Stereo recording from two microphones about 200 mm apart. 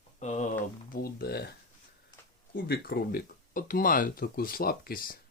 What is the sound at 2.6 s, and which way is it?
Speech, 50° left (ahead or behind).